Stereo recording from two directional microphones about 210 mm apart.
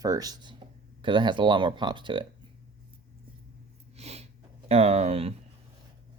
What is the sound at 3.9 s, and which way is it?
Snort, 30° right (ahead or behind).